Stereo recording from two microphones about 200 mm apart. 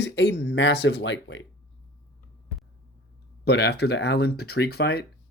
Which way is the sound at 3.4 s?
55° left (ahead or behind).